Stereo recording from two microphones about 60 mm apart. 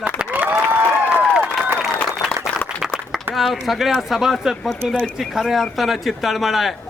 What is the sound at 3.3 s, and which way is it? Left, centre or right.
A man's voice, centre.